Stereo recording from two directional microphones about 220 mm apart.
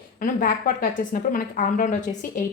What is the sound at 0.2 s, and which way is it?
A woman's voice, 40° left (ahead or behind).